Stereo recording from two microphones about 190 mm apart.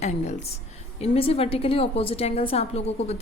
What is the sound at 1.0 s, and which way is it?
A woman's voice, 30° left (ahead or behind).